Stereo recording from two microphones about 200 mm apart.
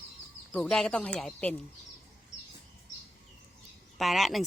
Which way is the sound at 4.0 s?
Centre (ahead or behind).